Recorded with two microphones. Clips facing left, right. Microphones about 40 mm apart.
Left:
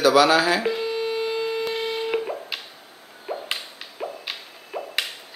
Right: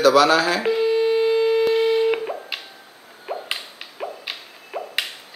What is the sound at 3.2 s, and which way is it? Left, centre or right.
Whip, centre.